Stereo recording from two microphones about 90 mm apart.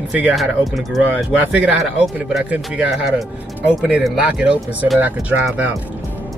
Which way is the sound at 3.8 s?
5° right (ahead or behind).